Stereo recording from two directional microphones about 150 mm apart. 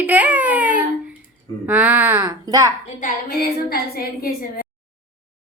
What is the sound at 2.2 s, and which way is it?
Speech, 25° right (ahead or behind).